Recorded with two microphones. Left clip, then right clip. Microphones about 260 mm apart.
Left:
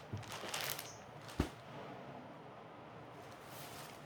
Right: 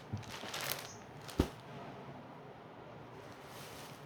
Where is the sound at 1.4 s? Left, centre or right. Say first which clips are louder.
Right 5 dB; right.